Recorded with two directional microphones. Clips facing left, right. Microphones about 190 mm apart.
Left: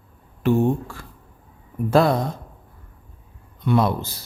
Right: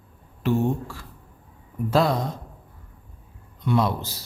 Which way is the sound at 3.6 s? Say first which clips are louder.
Left 3 dB; 55° left (ahead or behind).